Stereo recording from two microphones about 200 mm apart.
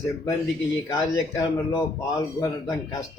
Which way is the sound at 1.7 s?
15° left (ahead or behind).